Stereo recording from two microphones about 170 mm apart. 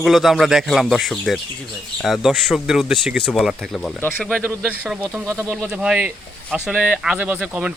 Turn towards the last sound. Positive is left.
turn(degrees=-5)  # may be behind; listen again after turning